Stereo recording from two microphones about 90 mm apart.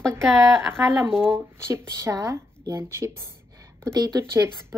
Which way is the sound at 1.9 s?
40° right (ahead or behind).